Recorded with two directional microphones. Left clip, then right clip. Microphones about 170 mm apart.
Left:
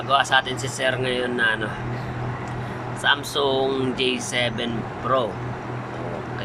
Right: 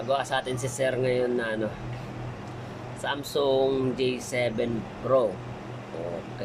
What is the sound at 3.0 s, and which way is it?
Speech, 25° right (ahead or behind).